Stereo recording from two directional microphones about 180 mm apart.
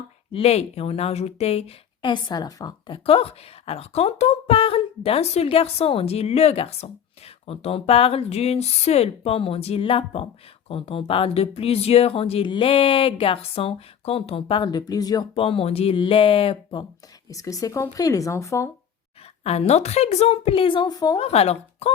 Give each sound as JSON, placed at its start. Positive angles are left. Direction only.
{"t": 0.3, "sound": "speech", "side_deg": 30}
{"t": 17.2, "sound": "speech", "side_deg": 20}
{"t": 19.5, "sound": "speech", "side_deg": 35}
{"t": 21.2, "sound": "speech", "side_deg": 35}